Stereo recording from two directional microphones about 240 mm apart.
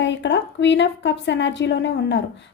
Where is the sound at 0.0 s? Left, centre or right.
Left.